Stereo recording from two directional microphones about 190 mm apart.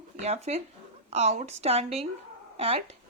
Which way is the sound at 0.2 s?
35° right (ahead or behind).